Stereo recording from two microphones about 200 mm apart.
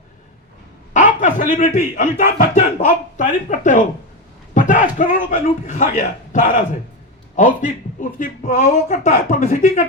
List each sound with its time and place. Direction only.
0.9 s speech: 40° left (ahead or behind)